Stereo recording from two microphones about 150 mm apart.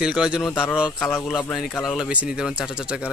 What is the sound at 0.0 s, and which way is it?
Speech, 5° right (ahead or behind).